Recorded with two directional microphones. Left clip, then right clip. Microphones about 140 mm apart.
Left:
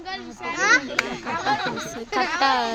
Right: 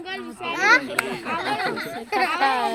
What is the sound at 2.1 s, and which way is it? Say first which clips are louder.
Speech: even; 20° left (ahead or behind).